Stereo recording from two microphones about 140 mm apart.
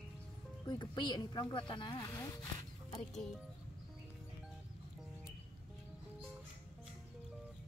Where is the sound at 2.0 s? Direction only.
20° left (ahead or behind).